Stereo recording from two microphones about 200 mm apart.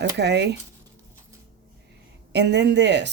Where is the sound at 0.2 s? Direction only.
60° right (ahead or behind).